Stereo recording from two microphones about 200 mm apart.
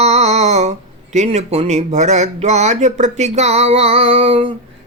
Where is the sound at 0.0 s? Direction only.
35° right (ahead or behind).